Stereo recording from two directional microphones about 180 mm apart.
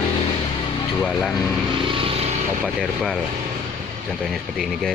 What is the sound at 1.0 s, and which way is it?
Speech, centre (ahead or behind).